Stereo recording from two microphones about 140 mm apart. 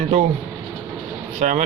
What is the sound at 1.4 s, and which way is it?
Speech, 65° right (ahead or behind).